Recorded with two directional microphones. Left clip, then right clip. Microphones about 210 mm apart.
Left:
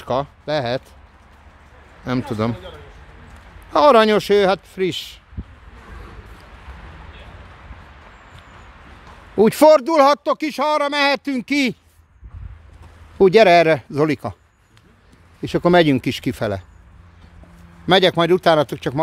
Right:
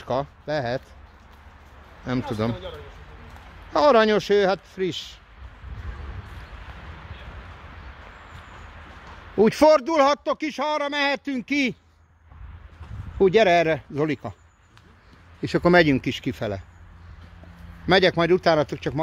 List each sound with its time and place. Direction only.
0.0 s a man's voice: 20° left (ahead or behind)
2.0 s a man's voice: 25° left (ahead or behind)
3.7 s a man's voice: 25° left (ahead or behind)
9.4 s a man's voice: 20° left (ahead or behind)
13.2 s a man's voice: 30° left (ahead or behind)
15.4 s speech: 5° left (ahead or behind)
15.7 s a man's voice: 20° left (ahead or behind)
17.8 s a man's voice: 15° left (ahead or behind)